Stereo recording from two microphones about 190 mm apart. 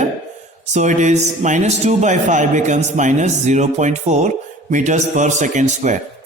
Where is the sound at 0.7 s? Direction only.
40° right (ahead or behind).